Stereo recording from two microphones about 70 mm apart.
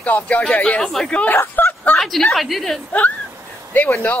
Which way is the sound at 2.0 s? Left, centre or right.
Centre.